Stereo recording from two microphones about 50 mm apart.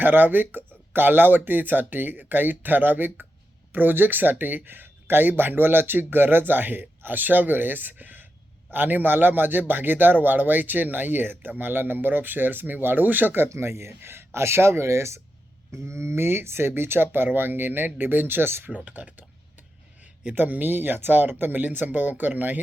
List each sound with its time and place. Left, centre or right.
0.0 s a man's voice: right
13.5 s speech: right
18.9 s a sound: right
20.2 s a man's voice: right